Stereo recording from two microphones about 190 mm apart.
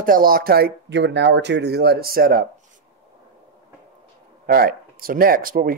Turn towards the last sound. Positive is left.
turn(degrees=-50)  # may be behind; listen again after turning